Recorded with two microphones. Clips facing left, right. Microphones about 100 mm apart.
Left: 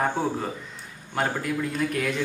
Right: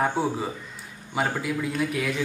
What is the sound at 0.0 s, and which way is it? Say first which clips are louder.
A man's voice: right 1 dB; 5° right (ahead or behind).